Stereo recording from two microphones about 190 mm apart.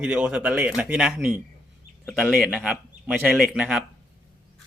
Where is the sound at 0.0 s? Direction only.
5° right (ahead or behind).